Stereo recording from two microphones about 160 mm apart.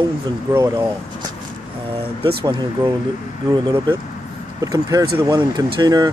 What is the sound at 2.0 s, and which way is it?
Speech, 30° right (ahead or behind).